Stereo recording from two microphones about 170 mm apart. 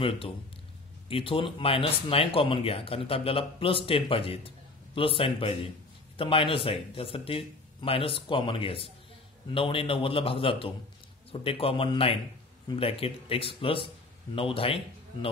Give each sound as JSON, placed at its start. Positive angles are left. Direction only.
{"t": 1.0, "sound": "speech", "side_deg": 35}